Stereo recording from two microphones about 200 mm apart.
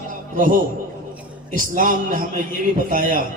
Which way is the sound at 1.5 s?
40° right (ahead or behind).